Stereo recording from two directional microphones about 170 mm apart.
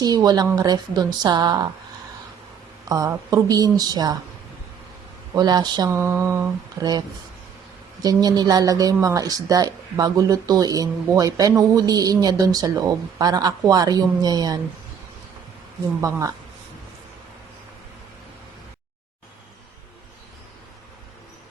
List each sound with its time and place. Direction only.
0.0 s speech: 25° right (ahead or behind)
2.9 s speech: 20° right (ahead or behind)
5.3 s speech: 25° right (ahead or behind)
8.0 s speech: 20° right (ahead or behind)
16.0 s speech: 20° right (ahead or behind)